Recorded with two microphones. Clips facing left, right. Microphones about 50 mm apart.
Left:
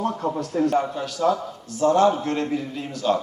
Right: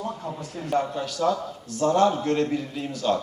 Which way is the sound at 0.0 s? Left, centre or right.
Left.